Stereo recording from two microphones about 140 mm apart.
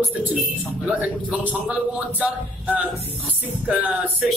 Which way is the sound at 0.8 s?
10° right (ahead or behind).